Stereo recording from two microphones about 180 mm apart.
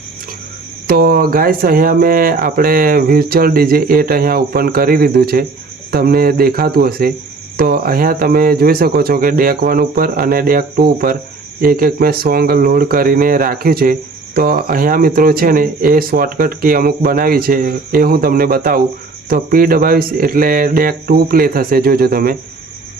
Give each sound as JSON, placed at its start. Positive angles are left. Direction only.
{"t": 0.9, "sound": "speech", "side_deg": -55}